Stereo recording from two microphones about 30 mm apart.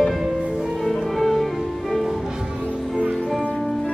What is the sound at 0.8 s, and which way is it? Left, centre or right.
Music, centre.